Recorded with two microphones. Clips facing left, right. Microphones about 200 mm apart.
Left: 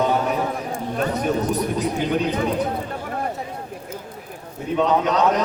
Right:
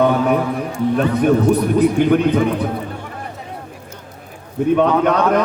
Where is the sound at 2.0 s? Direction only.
55° right (ahead or behind).